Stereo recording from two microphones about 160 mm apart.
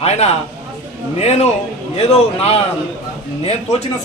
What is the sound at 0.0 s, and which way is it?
A man's voice, 40° left (ahead or behind).